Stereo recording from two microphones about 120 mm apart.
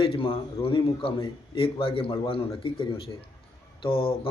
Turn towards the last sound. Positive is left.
turn(degrees=50)  # may be behind; listen again after turning